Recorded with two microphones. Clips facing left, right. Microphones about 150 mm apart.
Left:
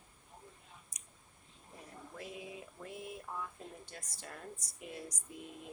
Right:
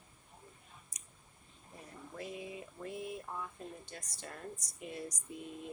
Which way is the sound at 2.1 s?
Centre (ahead or behind).